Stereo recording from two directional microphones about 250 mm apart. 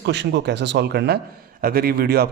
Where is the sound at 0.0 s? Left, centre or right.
Right.